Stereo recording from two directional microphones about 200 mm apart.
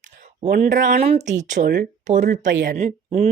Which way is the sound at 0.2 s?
45° right (ahead or behind).